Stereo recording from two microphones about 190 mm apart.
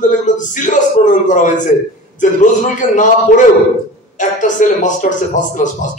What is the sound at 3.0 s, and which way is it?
A man's voice, 40° left (ahead or behind).